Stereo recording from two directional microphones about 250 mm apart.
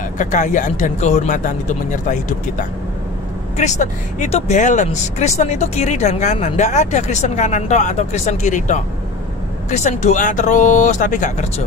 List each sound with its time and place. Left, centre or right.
0.2 s speech: left
3.5 s speech: left